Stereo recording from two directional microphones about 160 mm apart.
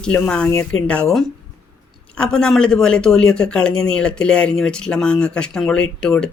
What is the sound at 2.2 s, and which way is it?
Speech, 5° left (ahead or behind).